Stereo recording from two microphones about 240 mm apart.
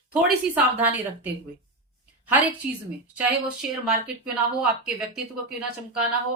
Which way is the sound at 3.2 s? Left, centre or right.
Centre.